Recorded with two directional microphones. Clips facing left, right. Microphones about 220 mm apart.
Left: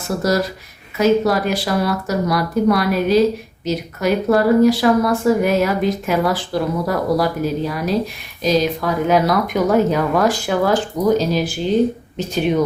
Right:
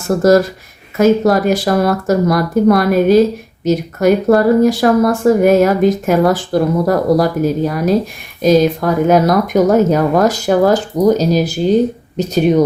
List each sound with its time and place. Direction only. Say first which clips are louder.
0.2 s speech: right 9 dB; 50° right (ahead or behind)